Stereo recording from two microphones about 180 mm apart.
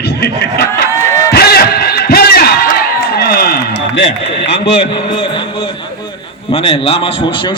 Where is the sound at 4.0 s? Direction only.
75° left (ahead or behind).